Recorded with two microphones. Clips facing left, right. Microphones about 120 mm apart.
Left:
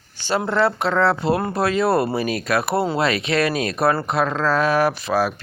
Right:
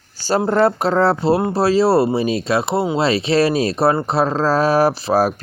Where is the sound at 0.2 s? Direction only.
40° right (ahead or behind).